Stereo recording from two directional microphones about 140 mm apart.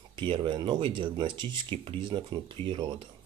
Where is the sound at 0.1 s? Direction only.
35° right (ahead or behind).